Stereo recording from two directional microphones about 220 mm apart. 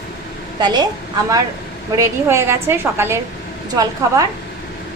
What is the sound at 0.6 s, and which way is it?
Speech, 20° right (ahead or behind).